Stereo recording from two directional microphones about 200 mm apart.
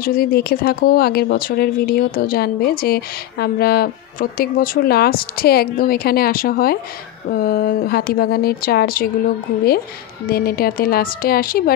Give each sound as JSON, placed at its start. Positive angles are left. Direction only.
{"t": 0.0, "sound": "speech", "side_deg": 45}
{"t": 10.2, "sound": "speech", "side_deg": 50}